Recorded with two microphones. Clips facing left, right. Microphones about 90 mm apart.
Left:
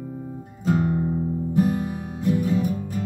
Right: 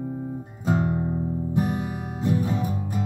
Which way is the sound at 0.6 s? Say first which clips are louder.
Left 2 dB; 20° right (ahead or behind).